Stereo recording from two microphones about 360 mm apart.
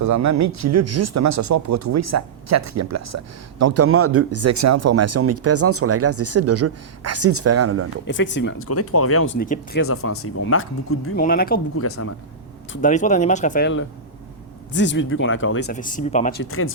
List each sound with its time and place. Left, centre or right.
0.0 s speech: right
8.0 s speech: left
9.8 s speech: left
11.2 s speech: left
11.8 s speech: left
12.7 s speech: left
15.7 s speech: left
16.5 s speech: left